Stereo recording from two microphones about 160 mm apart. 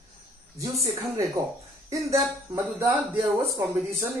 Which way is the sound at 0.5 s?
20° right (ahead or behind).